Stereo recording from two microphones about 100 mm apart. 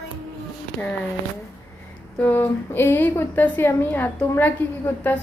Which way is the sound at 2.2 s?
20° left (ahead or behind).